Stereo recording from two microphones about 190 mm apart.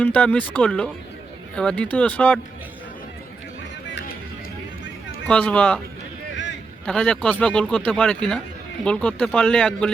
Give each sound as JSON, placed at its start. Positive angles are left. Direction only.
{"t": 0.0, "sound": "speech", "side_deg": 10}
{"t": 5.3, "sound": "speech", "side_deg": 5}
{"t": 6.3, "sound": "a sound", "side_deg": 70}
{"t": 6.8, "sound": "speech", "side_deg": 5}